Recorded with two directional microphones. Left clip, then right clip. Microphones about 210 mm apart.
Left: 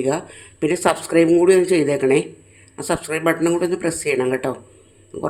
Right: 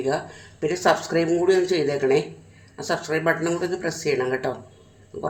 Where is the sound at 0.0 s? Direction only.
35° left (ahead or behind).